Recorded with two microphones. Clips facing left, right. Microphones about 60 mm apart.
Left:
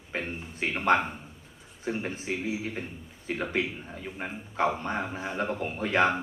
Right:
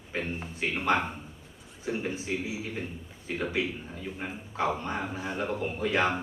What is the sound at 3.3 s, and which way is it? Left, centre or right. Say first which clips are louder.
A man's voice: left 1 dB; left.